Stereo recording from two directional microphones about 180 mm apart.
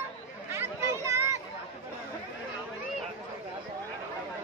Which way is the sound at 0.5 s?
15° right (ahead or behind).